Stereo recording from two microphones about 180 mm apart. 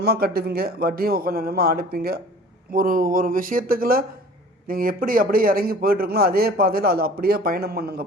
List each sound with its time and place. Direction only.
0.0 s a man's voice: 60° right (ahead or behind)